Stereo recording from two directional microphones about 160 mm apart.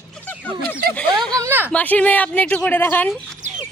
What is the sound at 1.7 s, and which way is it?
A woman's voice, 10° left (ahead or behind).